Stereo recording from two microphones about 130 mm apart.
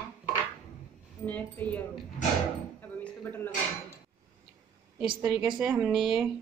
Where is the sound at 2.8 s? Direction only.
10° left (ahead or behind).